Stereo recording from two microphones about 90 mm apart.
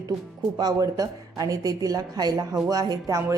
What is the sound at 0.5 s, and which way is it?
A woman's voice, 45° right (ahead or behind).